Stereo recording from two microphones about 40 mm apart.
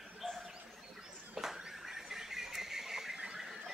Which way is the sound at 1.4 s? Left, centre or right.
Centre.